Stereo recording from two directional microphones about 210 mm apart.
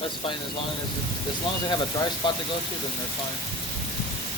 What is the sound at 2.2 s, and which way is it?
Speech, 20° left (ahead or behind).